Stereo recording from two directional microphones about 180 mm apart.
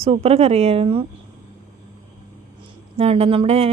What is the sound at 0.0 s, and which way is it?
Speech, 35° right (ahead or behind).